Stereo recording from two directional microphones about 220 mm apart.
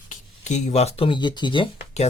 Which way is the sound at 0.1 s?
35° left (ahead or behind).